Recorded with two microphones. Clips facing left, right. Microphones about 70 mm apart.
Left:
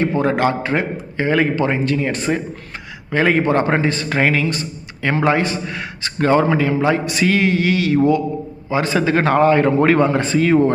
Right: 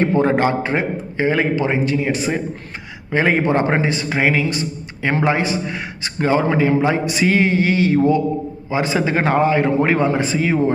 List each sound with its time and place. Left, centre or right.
0.0 s a man's voice: right; by 6.4 s centre
6.5 s a man's voice: right